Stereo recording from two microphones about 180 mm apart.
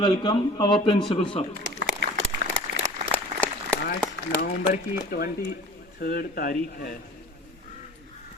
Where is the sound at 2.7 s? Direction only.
90° right.